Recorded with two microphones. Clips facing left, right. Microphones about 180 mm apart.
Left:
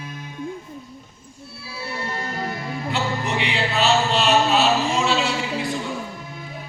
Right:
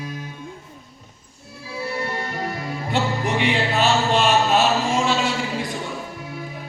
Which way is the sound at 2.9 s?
50° right (ahead or behind).